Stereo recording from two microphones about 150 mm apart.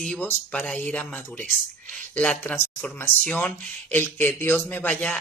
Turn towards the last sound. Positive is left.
turn(degrees=10)  # may be behind; listen again after turning